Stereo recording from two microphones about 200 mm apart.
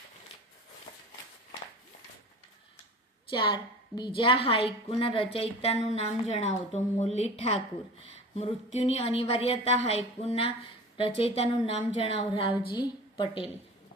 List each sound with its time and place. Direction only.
3.2 s a woman's voice: 25° left (ahead or behind)